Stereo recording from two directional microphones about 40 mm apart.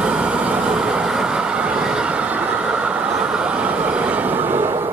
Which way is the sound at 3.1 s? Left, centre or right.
Right.